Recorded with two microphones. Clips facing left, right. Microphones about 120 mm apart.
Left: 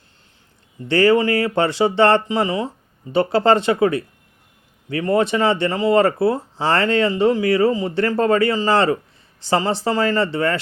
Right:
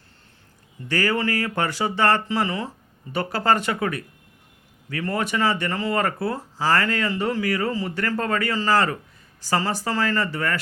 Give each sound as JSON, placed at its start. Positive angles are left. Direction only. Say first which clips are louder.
{"t": 0.9, "sound": "speech", "louder": "left 8 dB", "side_deg": 25}